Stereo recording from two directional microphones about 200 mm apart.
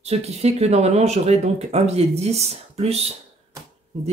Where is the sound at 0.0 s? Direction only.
30° right (ahead or behind).